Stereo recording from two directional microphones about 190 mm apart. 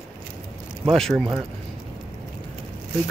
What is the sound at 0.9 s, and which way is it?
Speech, centre (ahead or behind).